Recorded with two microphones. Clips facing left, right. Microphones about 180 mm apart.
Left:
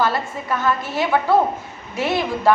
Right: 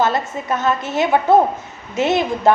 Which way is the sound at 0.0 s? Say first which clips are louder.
Right 3 dB; 20° right (ahead or behind).